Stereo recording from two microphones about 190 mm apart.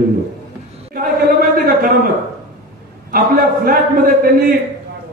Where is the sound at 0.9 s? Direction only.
50° right (ahead or behind).